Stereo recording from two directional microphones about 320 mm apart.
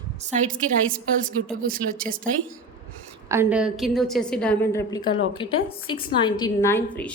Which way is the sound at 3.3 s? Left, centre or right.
Centre.